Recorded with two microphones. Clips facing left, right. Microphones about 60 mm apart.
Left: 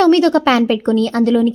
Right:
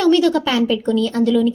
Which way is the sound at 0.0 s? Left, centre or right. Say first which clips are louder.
Left 4 dB; left.